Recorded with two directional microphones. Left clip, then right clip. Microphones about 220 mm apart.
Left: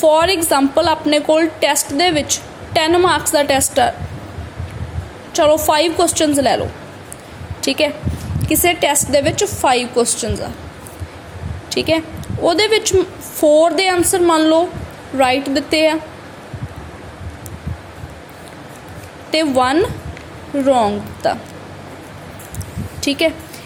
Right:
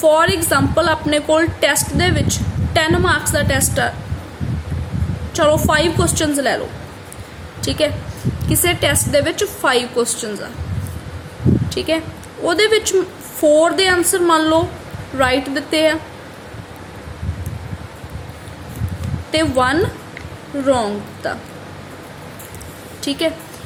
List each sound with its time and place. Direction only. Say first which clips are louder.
0.0 s a woman's voice: left 1 dB; 15° left (ahead or behind)
5.3 s a woman's voice: left 2 dB; 10° left (ahead or behind)
7.6 s a woman's voice: left 2 dB; 15° left (ahead or behind)
11.7 s a woman's voice: left 3 dB; 15° left (ahead or behind)
19.3 s a woman's voice: left 1 dB; 15° left (ahead or behind)
23.0 s a woman's voice: left 3 dB; 20° left (ahead or behind)